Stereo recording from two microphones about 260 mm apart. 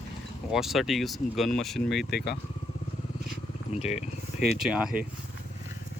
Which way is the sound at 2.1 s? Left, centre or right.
Left.